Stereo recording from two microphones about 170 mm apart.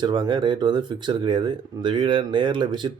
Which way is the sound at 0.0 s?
25° right (ahead or behind).